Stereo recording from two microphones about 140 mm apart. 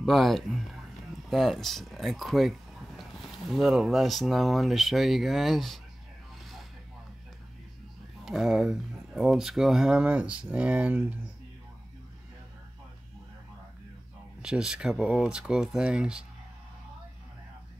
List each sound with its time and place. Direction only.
0.0 s speech: centre (ahead or behind)
8.3 s speech: 5° right (ahead or behind)
14.4 s speech: 5° right (ahead or behind)